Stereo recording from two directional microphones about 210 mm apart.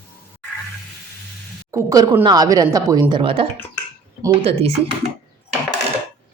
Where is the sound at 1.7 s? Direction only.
15° right (ahead or behind).